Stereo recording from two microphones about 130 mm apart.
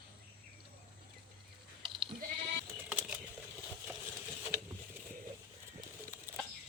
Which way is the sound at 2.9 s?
10° right (ahead or behind).